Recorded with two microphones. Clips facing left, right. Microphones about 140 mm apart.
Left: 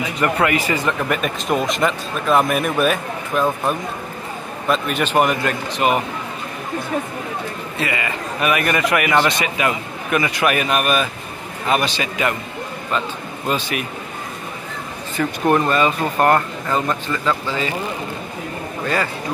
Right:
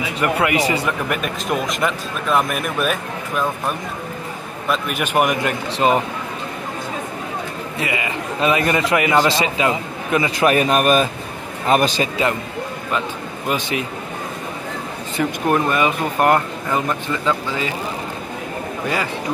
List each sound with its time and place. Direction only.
0.0 s a man's voice: 10° right (ahead or behind)
4.6 s speech: 10° right (ahead or behind); by 5.9 s 25° right (ahead or behind)
7.8 s a man's voice: 20° right (ahead or behind); by 12.1 s 40° right (ahead or behind)
13.5 s a man's voice: 25° right (ahead or behind)
15.2 s speech: 15° right (ahead or behind)